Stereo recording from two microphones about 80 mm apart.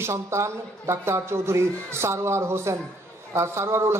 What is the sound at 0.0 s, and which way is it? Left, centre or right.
A man's voice, right.